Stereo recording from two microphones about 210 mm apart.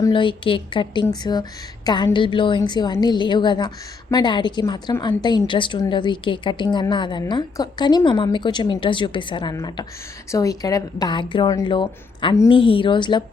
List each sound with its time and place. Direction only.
0.0 s a woman's voice: 25° left (ahead or behind)